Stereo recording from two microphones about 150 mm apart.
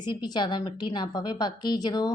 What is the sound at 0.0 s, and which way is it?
A woman's voice, 30° left (ahead or behind).